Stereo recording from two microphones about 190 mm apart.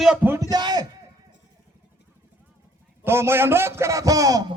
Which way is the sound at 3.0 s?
15° right (ahead or behind).